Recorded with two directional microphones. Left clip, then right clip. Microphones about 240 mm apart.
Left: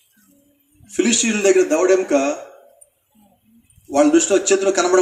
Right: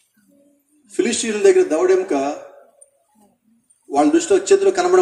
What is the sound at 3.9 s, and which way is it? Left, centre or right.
A man's voice, left.